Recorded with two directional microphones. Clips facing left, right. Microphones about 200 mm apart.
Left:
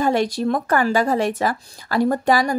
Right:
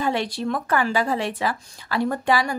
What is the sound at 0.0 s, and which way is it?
A woman's voice, 45° left (ahead or behind).